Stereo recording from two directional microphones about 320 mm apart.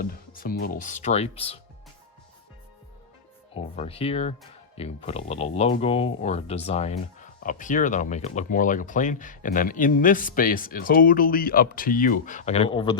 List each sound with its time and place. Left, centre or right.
0.0 s speech: left
3.5 s speech: centre